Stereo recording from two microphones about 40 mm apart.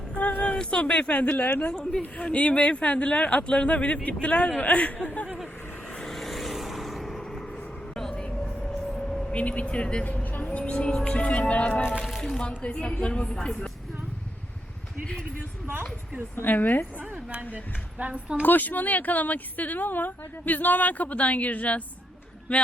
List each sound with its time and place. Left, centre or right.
0.2 s a sound: left
0.4 s speech: left
1.7 s speech: centre
2.3 s speech: left
6.0 s vehicle: centre
9.3 s speech: left
10.3 s music: left
10.6 s speech: left
12.2 s speech: left
16.3 s speech: left
17.5 s a woman's voice: right
18.1 s speech: right
18.4 s speech: left